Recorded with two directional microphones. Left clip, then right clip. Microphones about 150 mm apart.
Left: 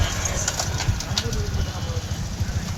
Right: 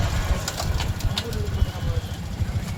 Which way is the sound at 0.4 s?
30° left (ahead or behind).